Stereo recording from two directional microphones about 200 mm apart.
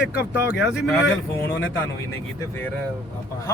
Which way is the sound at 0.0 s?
5° right (ahead or behind).